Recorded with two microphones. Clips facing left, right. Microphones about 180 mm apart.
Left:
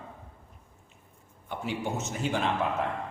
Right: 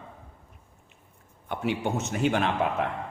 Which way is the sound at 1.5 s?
65° right (ahead or behind).